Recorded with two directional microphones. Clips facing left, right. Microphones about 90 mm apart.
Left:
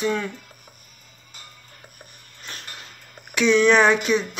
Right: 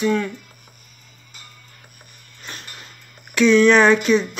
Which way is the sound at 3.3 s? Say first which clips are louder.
Right 3 dB; 15° left (ahead or behind).